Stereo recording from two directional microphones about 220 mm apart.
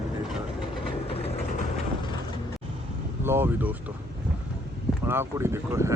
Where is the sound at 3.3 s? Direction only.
10° right (ahead or behind).